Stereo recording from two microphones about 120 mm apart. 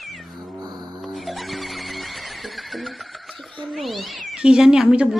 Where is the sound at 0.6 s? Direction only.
35° right (ahead or behind).